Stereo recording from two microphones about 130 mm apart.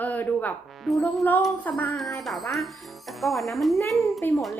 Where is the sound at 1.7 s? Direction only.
15° left (ahead or behind).